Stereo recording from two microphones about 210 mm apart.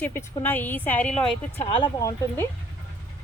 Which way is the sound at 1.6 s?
20° left (ahead or behind).